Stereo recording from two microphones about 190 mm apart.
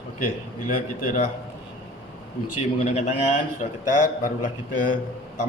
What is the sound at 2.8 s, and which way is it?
A man's voice, 40° left (ahead or behind).